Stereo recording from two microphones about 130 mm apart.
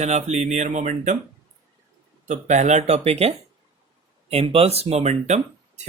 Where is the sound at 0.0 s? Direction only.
60° right (ahead or behind).